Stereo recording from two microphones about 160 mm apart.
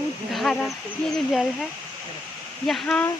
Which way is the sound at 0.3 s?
Centre (ahead or behind).